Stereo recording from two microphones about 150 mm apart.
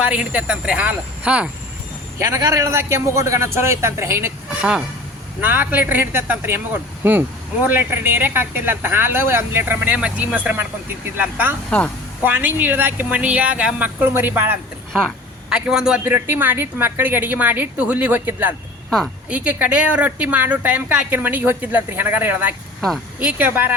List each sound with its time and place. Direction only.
0.0 s speech: 10° right (ahead or behind)
2.1 s speech: 20° right (ahead or behind)
5.4 s a man's voice: 10° right (ahead or behind)
16.0 s speech: 15° right (ahead or behind)
18.9 s speech: 5° left (ahead or behind)
19.3 s speech: 10° right (ahead or behind)